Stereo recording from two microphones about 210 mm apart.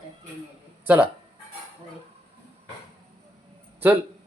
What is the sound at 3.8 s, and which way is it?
Speech, 10° right (ahead or behind).